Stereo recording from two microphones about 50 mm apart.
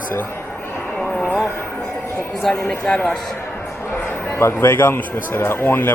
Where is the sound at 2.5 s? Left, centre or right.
Left.